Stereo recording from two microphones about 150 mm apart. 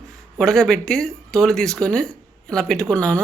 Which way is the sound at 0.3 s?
5° left (ahead or behind).